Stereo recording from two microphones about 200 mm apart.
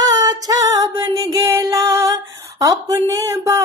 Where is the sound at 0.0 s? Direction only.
20° right (ahead or behind).